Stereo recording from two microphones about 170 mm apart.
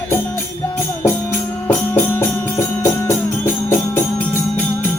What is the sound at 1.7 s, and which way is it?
Music, 10° left (ahead or behind).